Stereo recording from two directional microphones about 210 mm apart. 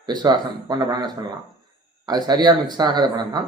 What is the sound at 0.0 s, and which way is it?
A man's voice, 20° right (ahead or behind).